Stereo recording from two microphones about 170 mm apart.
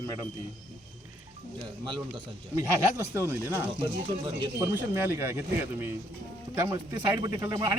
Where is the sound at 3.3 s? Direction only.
15° right (ahead or behind).